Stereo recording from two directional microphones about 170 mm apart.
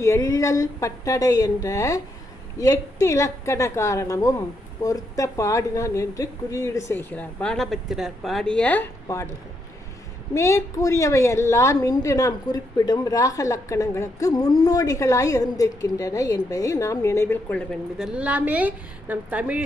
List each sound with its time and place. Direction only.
0.0 s a woman's voice: 20° left (ahead or behind)
10.3 s a woman's voice: 15° left (ahead or behind); by 19.6 s 10° right (ahead or behind)